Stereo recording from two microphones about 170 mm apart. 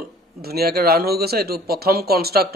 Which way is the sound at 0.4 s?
65° right (ahead or behind).